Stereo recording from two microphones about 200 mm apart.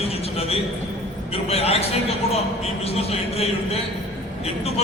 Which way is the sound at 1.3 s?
30° left (ahead or behind).